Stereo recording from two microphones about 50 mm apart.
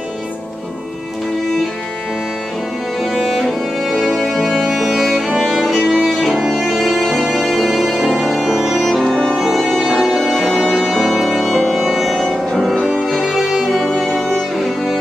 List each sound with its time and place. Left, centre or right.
3.0 s music: centre
6.1 s violin: centre
6.4 s music: centre
12.8 s violin: centre
13.8 s music: centre